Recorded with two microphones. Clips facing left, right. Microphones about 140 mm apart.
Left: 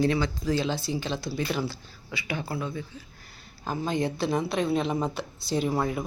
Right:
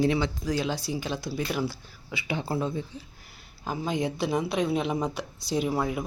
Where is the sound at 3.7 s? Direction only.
10° right (ahead or behind).